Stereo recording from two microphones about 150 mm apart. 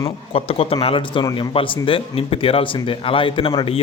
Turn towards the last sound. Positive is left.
turn(degrees=35)  # may be behind; listen again after turning